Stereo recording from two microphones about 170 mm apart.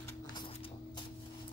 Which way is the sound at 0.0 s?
25° left (ahead or behind).